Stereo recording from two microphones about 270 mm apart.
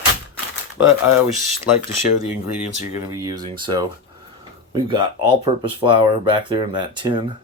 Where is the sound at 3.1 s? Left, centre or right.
Centre.